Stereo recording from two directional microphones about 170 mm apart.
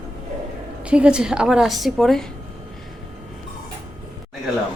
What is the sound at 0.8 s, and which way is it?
A woman's voice, 5° right (ahead or behind).